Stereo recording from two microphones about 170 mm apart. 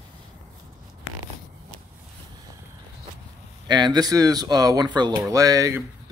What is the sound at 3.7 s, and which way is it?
Speech, 25° right (ahead or behind).